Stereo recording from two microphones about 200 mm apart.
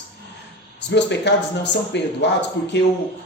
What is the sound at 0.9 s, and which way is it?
Speech, 60° left (ahead or behind).